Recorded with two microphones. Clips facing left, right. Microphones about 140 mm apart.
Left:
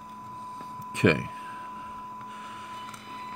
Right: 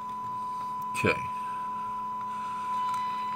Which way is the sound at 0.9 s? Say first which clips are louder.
Left 6 dB; 70° left (ahead or behind).